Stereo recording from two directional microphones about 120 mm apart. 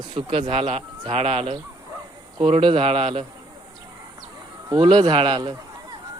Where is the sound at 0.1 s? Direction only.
50° right (ahead or behind).